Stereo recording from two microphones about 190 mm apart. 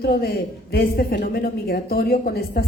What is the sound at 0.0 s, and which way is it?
A woman's voice, 55° left (ahead or behind).